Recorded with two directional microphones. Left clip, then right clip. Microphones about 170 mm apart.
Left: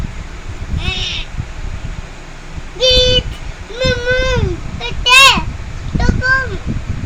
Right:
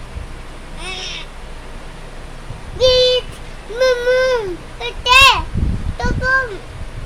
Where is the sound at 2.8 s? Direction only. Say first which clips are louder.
Left 1 dB; 10° right (ahead or behind).